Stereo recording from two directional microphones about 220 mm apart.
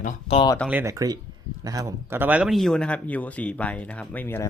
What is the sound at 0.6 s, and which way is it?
Speech, 10° right (ahead or behind).